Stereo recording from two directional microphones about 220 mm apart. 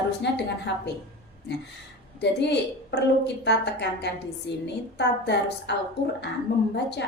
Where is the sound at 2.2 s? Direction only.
50° left (ahead or behind).